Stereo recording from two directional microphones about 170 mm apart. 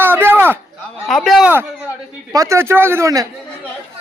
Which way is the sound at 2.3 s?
15° right (ahead or behind).